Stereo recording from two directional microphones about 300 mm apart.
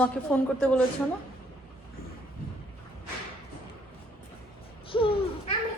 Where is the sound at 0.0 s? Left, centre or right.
Centre.